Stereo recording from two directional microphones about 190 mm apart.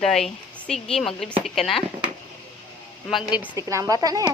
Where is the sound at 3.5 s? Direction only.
15° right (ahead or behind).